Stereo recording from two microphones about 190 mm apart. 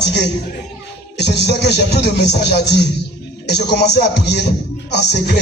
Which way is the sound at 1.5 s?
60° left (ahead or behind).